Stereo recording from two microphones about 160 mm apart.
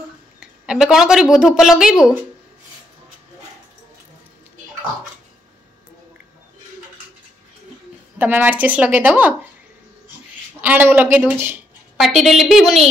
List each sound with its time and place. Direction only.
0.4 s speech: 5° right (ahead or behind)
8.2 s speech: 10° right (ahead or behind)
10.6 s speech: 10° right (ahead or behind)